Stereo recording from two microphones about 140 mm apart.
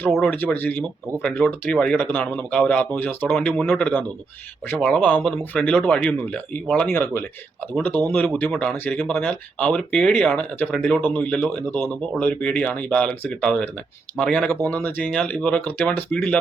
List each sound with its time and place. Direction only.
0.1 s speech: 5° left (ahead or behind)